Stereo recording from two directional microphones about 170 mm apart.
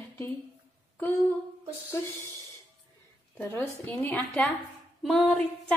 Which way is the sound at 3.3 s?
10° left (ahead or behind).